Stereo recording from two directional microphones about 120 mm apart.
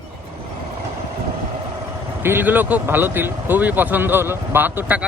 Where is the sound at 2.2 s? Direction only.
15° right (ahead or behind).